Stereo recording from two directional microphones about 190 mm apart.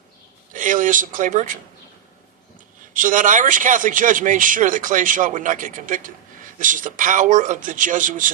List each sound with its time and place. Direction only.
0.5 s speech: 45° right (ahead or behind)
2.9 s a man's voice: 45° right (ahead or behind)